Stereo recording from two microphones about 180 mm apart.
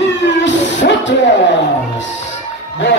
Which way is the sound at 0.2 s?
75° left (ahead or behind).